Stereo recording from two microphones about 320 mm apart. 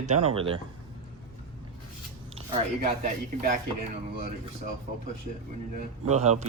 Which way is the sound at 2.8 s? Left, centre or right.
Right.